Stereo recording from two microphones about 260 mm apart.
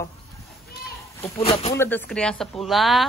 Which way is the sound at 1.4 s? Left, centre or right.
Left.